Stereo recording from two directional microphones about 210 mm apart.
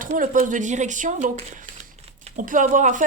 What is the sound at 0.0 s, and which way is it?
Speech, 40° right (ahead or behind).